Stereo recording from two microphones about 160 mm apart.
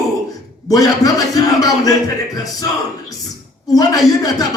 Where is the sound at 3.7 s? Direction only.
20° left (ahead or behind).